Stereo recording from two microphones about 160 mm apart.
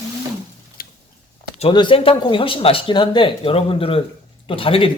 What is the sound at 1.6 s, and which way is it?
Speech, 30° left (ahead or behind).